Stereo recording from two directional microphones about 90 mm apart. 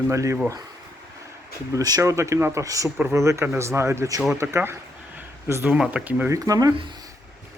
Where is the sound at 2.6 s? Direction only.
40° right (ahead or behind); by 6.3 s 20° right (ahead or behind).